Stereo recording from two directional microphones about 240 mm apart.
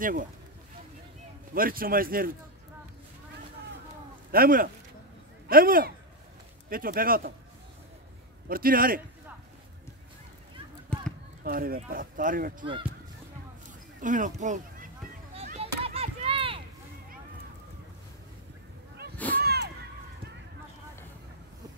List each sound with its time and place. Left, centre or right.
0.0 s speech: right
1.5 s speech: right
4.3 s speech: right
8.5 s speech: right
10.9 s basketball bounce: centre
11.4 s speech: right
14.0 s speech: right
15.4 s chop: right
19.1 s a sound: centre
19.4 s a sound: right